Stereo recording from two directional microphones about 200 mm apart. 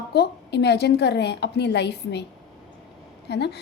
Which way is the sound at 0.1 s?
55° left (ahead or behind).